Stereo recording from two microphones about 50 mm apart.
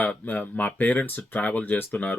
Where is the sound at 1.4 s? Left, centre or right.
Left.